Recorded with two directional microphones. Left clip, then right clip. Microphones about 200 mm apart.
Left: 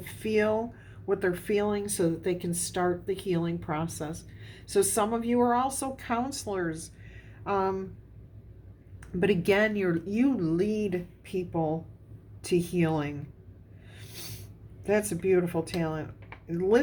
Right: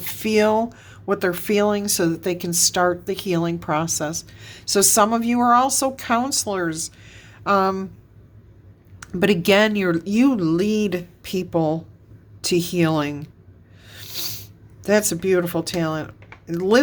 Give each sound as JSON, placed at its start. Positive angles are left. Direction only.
{"t": 0.0, "sound": "a woman's voice", "side_deg": -40}
{"t": 9.0, "sound": "a woman's voice", "side_deg": -40}
{"t": 13.8, "sound": "snake", "side_deg": -40}
{"t": 14.8, "sound": "a woman's voice", "side_deg": -40}